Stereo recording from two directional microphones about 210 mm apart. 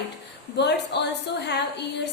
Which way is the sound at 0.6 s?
55° left (ahead or behind).